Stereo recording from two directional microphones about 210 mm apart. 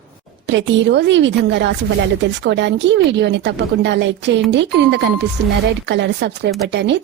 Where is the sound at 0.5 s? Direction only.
60° right (ahead or behind).